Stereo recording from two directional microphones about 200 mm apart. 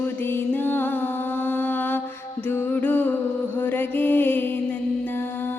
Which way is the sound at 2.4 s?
10° left (ahead or behind).